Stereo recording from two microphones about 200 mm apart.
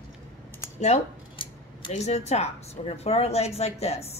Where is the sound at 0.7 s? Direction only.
35° left (ahead or behind).